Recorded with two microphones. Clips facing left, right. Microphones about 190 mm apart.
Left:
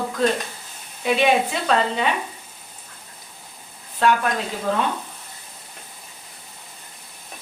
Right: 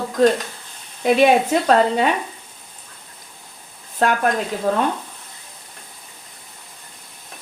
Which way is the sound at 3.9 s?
45° right (ahead or behind).